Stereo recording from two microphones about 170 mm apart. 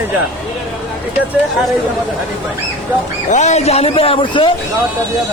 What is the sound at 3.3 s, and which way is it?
A man's voice, 45° left (ahead or behind).